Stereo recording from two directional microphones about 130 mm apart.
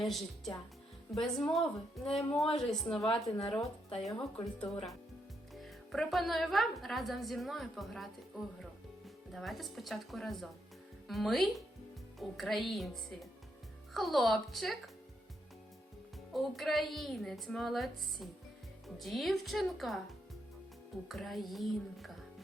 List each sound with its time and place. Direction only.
0.0 s a woman's voice: centre (ahead or behind)
4.4 s speech: 45° left (ahead or behind)
5.5 s a woman's voice: centre (ahead or behind)
9.3 s a woman's voice: centre (ahead or behind)
16.3 s a woman's voice: centre (ahead or behind)